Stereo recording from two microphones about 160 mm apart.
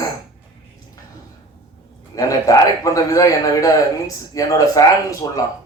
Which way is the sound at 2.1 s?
20° left (ahead or behind).